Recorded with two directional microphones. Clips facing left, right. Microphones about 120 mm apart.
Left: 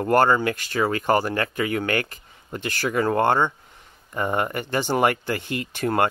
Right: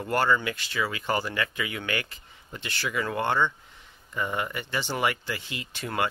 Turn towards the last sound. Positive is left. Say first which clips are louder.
# left 7 dB
turn(degrees=45)  # may be behind; listen again after turning